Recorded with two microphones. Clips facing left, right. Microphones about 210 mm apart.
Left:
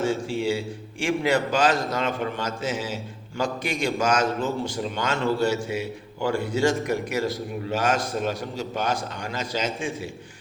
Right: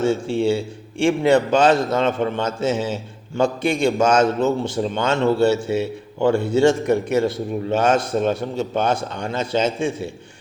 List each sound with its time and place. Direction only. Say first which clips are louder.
0.0 s a man's voice: right 6 dB; 25° right (ahead or behind)